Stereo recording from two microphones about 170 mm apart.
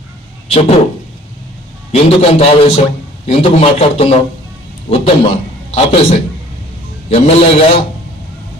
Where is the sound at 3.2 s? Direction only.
35° left (ahead or behind).